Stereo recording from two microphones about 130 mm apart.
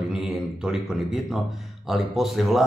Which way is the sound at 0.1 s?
5° right (ahead or behind).